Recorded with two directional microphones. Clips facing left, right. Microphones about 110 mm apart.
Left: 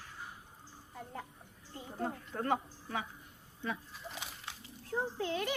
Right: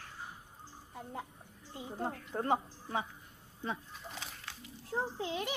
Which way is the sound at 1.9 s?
25° right (ahead or behind).